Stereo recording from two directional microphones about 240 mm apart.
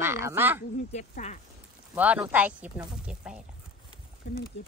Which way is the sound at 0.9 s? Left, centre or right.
Left.